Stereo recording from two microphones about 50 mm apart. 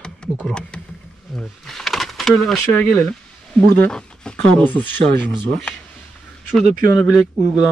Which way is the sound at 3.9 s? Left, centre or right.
Centre.